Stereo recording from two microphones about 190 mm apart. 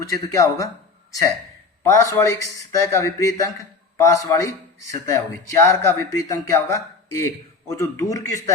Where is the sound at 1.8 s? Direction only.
15° left (ahead or behind).